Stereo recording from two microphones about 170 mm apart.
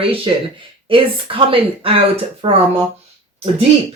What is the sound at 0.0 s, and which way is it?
Speech, 30° right (ahead or behind).